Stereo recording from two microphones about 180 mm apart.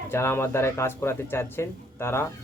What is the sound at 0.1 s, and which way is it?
Speech, 15° left (ahead or behind).